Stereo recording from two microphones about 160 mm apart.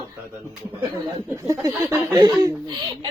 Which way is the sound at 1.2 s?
20° right (ahead or behind).